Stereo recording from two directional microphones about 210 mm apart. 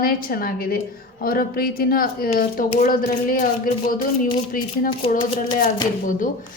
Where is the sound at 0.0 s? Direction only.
45° left (ahead or behind).